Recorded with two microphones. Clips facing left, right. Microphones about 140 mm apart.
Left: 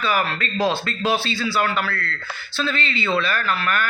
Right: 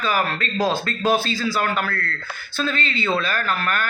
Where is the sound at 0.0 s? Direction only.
40° right (ahead or behind).